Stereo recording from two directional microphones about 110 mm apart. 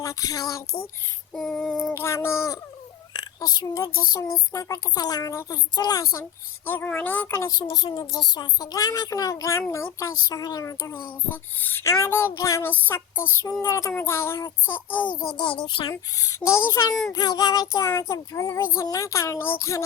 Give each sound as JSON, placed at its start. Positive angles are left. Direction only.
{"t": 0.0, "sound": "speech", "side_deg": 30}
{"t": 1.3, "sound": "female singing", "side_deg": 5}
{"t": 1.9, "sound": "child singing", "side_deg": 25}
{"t": 3.1, "sound": "a sound", "side_deg": 40}
{"t": 4.5, "sound": "speech", "side_deg": 35}
{"t": 5.3, "sound": "child singing", "side_deg": 25}
{"t": 5.7, "sound": "speech", "side_deg": 35}
{"t": 6.7, "sound": "child singing", "side_deg": 15}
{"t": 7.5, "sound": "speech", "side_deg": 40}
{"t": 11.6, "sound": "child singing", "side_deg": 20}
{"t": 15.4, "sound": "a child's voice", "side_deg": 45}
{"t": 15.9, "sound": "child singing", "side_deg": 30}
{"t": 17.1, "sound": "speech", "side_deg": 35}